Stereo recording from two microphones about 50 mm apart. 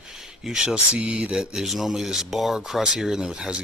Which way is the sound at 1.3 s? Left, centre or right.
Centre.